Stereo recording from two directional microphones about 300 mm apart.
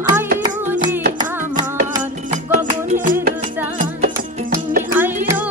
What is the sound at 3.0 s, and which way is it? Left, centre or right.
Music, right.